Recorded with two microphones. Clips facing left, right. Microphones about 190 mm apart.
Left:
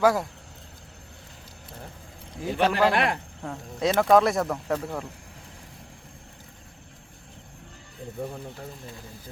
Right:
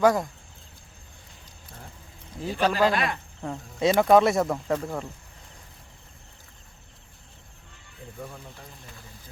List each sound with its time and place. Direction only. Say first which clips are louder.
0.0 s speech: right 1 dB; 5° left (ahead or behind)
2.5 s speech: left 1 dB; 65° left (ahead or behind)
3.4 s speech: right 2 dB; centre (ahead or behind)